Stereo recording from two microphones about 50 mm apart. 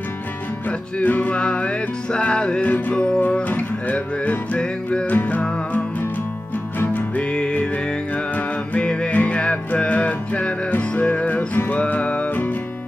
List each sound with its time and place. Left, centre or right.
0.7 s music: left
1.4 s music: left
2.7 s music: left
4.6 s music: centre
5.0 s music: left
7.2 s music: centre
8.7 s music: centre; by 11.8 s left
11.8 s music: left
12.3 s music: left